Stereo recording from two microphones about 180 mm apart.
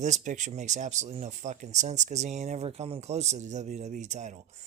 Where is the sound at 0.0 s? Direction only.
40° right (ahead or behind).